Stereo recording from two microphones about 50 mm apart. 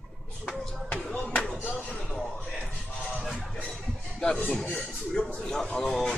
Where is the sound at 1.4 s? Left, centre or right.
Centre.